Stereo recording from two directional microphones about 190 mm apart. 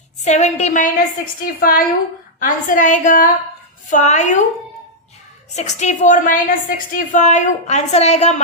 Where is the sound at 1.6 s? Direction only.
50° left (ahead or behind).